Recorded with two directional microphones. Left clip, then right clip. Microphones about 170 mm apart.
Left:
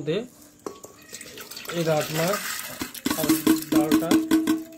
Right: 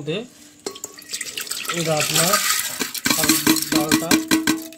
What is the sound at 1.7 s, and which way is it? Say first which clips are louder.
Speech: right 2 dB; 5° right (ahead or behind).